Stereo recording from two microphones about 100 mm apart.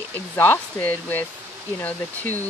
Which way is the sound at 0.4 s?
20° left (ahead or behind).